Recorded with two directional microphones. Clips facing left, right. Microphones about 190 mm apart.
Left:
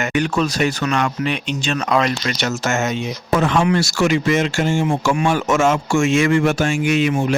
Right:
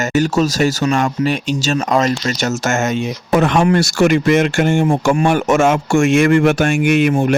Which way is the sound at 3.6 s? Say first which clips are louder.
Right 4 dB; 55° right (ahead or behind).